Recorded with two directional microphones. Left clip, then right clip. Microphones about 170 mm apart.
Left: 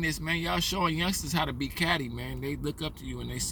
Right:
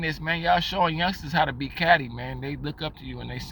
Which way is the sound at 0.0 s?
15° left (ahead or behind).